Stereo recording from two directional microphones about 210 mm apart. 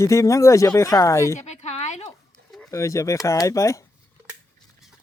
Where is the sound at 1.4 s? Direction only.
30° left (ahead or behind).